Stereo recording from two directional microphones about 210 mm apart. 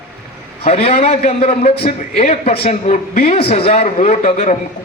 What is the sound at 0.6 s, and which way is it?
A man's voice, 30° left (ahead or behind).